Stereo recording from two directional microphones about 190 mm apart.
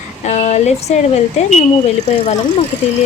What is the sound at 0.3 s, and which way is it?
A woman's voice, 35° left (ahead or behind).